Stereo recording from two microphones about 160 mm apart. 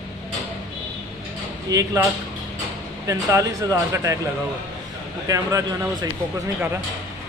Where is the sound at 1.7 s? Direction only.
20° right (ahead or behind).